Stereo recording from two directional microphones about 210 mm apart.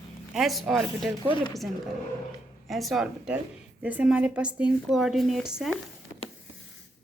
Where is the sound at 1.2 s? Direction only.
20° left (ahead or behind).